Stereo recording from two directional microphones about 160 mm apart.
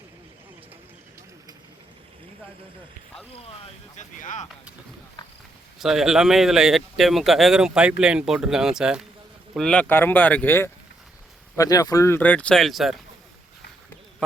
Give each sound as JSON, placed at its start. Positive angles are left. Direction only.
{"t": 3.9, "sound": "speech", "side_deg": 50}
{"t": 5.8, "sound": "speech", "side_deg": 0}